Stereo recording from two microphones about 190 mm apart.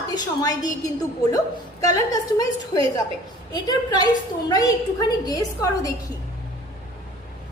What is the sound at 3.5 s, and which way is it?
A woman's voice, 20° left (ahead or behind).